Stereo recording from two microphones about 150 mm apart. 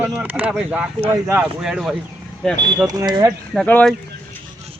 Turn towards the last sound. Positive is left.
turn(degrees=5)  # may be behind; listen again after turning